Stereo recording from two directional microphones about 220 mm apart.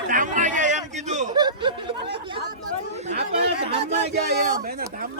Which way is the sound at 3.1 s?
25° right (ahead or behind).